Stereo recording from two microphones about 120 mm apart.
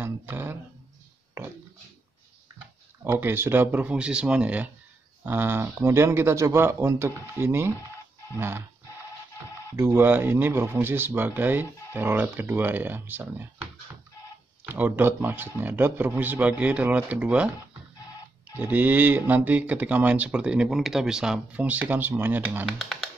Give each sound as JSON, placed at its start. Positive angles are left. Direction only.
{"t": 0.0, "sound": "speech", "side_deg": -15}
{"t": 3.0, "sound": "speech", "side_deg": -20}
{"t": 9.8, "sound": "speech", "side_deg": -20}
{"t": 14.7, "sound": "speech", "side_deg": -15}
{"t": 18.6, "sound": "speech", "side_deg": -15}
{"t": 22.7, "sound": "speech", "side_deg": 0}